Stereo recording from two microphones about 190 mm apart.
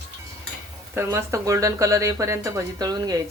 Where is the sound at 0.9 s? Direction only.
15° right (ahead or behind).